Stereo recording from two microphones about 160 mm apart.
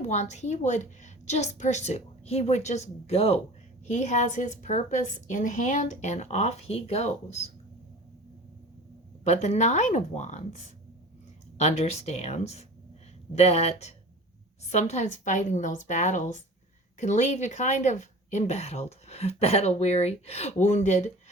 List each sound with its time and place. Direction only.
0.0 s a woman's voice: 45° left (ahead or behind)
9.2 s a woman's voice: 45° left (ahead or behind)
11.5 s a woman's voice: 45° left (ahead or behind)